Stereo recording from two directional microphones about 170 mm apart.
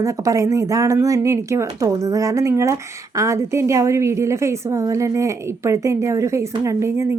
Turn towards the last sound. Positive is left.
turn(degrees=-15)  # may be behind; listen again after turning